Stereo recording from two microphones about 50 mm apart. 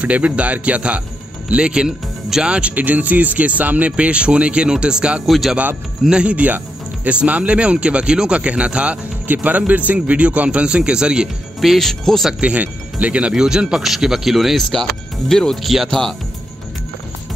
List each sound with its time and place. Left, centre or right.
0.0 s speech: right; by 2.5 s centre
2.5 s speech: right
5.2 s speech: centre
6.0 s speech: right
9.3 s speech: right
11.6 s speech: centre
12.4 s speech: right; by 16.0 s centre